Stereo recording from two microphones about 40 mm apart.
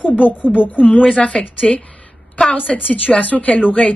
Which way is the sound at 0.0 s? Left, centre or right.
Left.